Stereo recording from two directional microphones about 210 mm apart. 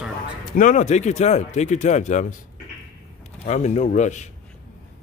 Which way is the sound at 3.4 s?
35° left (ahead or behind).